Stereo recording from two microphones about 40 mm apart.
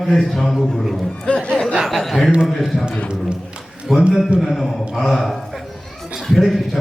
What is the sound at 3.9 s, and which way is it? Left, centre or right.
Speech, centre.